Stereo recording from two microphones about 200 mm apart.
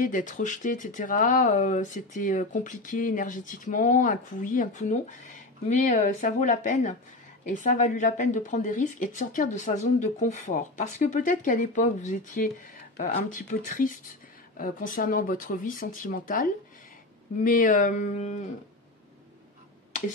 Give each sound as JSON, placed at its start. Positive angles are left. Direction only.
{"t": 0.0, "sound": "speech", "side_deg": 40}